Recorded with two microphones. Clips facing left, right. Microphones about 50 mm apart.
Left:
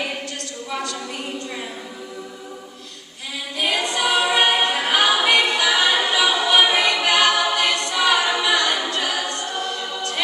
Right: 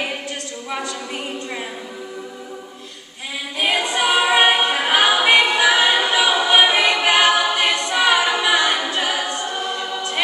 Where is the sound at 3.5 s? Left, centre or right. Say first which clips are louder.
Right 2 dB; centre.